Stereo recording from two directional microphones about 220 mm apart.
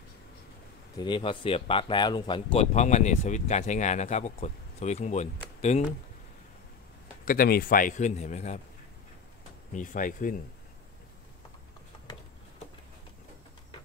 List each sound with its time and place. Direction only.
0.9 s speech: 20° left (ahead or behind)
7.2 s speech: 40° left (ahead or behind)
9.7 s speech: 35° left (ahead or behind)